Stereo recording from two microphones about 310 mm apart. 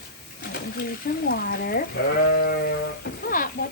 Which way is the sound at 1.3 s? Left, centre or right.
Left.